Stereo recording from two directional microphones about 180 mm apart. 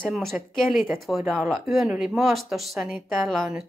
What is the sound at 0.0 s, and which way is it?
A woman's voice, centre (ahead or behind).